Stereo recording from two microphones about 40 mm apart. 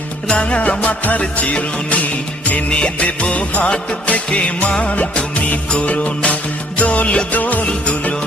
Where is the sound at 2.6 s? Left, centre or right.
Left.